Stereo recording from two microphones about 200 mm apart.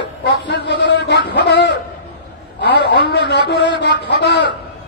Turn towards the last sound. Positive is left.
turn(degrees=55)  # may be behind; listen again after turning